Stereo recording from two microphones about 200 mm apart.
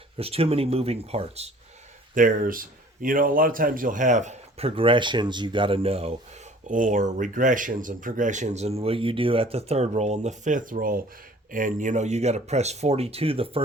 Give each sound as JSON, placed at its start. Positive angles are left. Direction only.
{"t": 0.2, "sound": "speech", "side_deg": -30}
{"t": 2.1, "sound": "speech", "side_deg": -40}
{"t": 6.7, "sound": "speech", "side_deg": -40}